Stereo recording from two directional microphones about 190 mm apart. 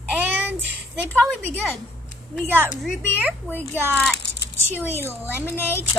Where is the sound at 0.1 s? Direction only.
10° right (ahead or behind).